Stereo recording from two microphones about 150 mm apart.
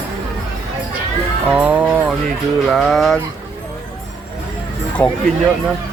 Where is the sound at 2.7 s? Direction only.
Centre (ahead or behind).